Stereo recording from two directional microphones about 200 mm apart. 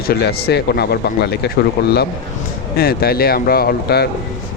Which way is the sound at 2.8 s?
50° left (ahead or behind).